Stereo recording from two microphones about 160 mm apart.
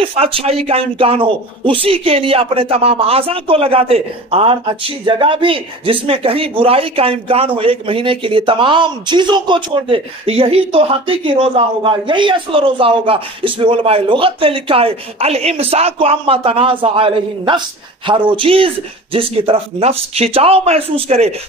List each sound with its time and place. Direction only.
0.0 s speech: 40° right (ahead or behind)